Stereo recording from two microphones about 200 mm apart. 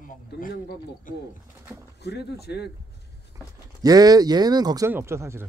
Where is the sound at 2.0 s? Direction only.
55° left (ahead or behind).